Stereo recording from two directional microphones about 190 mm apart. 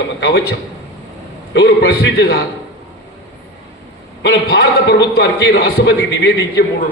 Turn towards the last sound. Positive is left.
turn(degrees=65)  # may be behind; listen again after turning